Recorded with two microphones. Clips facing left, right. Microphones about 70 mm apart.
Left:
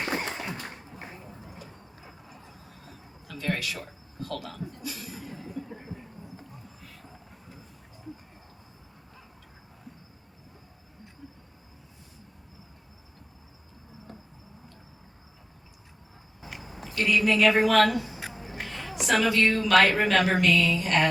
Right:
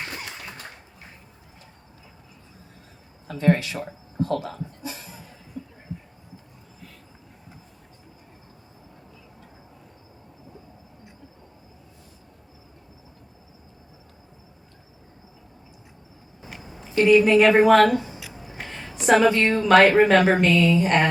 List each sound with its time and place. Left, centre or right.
0.1 s applause: left
3.2 s speech: right
5.9 s a sound: left
16.9 s speech: right
19.0 s speech: right